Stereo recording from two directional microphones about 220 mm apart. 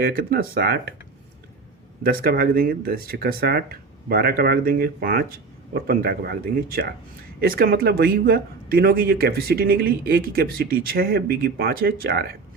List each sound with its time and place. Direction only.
0.0 s a man's voice: 40° right (ahead or behind)
2.0 s a man's voice: 40° right (ahead or behind)